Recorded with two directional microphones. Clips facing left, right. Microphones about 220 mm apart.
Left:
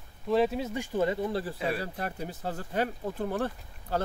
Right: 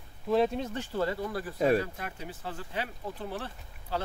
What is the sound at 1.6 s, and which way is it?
Speech, 45° right (ahead or behind).